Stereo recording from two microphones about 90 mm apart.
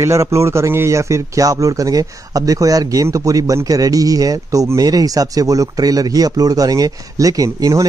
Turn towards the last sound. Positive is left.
turn(degrees=-40)  # may be behind; listen again after turning